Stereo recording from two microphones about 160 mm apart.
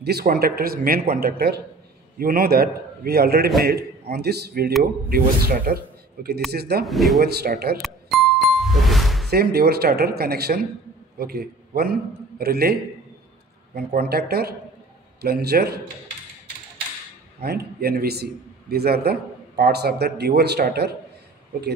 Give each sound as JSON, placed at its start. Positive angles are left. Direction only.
{"t": 0.0, "sound": "a man's voice", "side_deg": -80}
{"t": 5.1, "sound": "a man's voice", "side_deg": -70}
{"t": 6.9, "sound": "speech", "side_deg": 0}
{"t": 7.2, "sound": "a man's voice", "side_deg": -80}
{"t": 7.8, "sound": "music", "side_deg": 0}
{"t": 9.3, "sound": "a man's voice", "side_deg": -75}
{"t": 17.4, "sound": "a man's voice", "side_deg": -85}